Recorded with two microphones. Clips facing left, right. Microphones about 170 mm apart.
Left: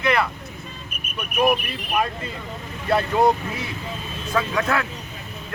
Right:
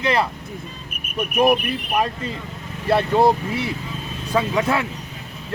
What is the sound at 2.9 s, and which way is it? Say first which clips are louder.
Speech: right 2 dB; 30° right (ahead or behind).